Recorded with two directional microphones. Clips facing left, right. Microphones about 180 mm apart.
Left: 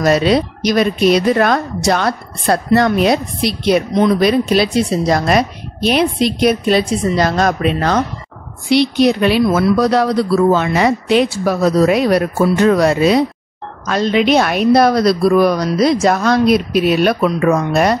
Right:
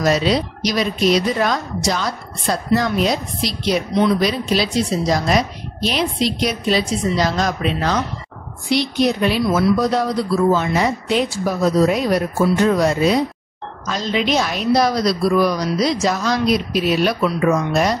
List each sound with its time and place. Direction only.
0.0 s a woman's voice: 60° left (ahead or behind)
8.6 s speech: 70° left (ahead or behind)
13.8 s a woman's voice: 60° left (ahead or behind)